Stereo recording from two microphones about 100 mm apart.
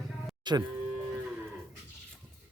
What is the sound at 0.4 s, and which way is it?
Speech, 45° right (ahead or behind).